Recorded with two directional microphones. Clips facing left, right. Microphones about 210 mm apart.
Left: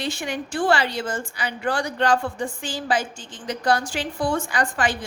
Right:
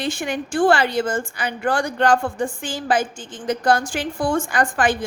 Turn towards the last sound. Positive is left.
turn(degrees=-50)  # may be behind; listen again after turning